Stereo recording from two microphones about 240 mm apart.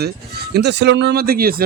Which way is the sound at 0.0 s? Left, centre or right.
Right.